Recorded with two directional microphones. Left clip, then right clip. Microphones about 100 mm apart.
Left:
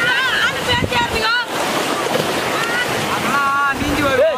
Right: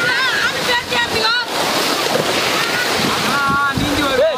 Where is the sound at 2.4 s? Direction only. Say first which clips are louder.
Right 2 dB; 50° right (ahead or behind).